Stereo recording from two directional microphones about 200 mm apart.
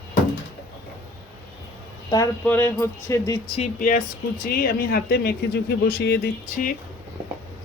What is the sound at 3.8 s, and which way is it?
Speech, 45° left (ahead or behind).